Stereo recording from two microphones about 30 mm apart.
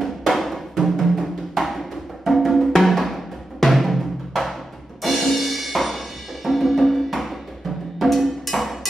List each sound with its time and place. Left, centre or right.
0.0 s music: centre